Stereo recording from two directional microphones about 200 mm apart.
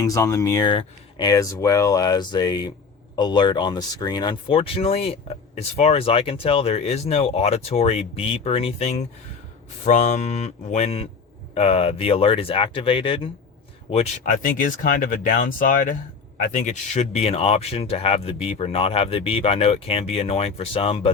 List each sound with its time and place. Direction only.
0.0 s speech: 15° left (ahead or behind)